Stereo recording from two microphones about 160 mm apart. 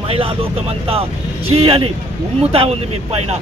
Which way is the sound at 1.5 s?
35° right (ahead or behind).